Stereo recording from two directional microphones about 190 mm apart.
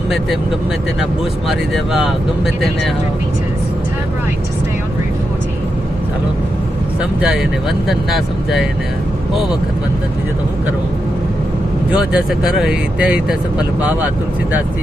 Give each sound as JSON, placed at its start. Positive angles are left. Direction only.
{"t": 1.5, "sound": "speech", "side_deg": 0}
{"t": 7.9, "sound": "speech", "side_deg": 0}
{"t": 11.9, "sound": "speech", "side_deg": -5}